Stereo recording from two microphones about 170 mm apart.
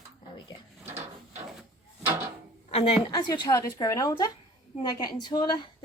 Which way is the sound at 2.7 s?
35° left (ahead or behind).